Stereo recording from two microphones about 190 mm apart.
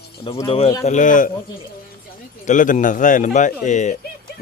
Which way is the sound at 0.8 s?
40° left (ahead or behind).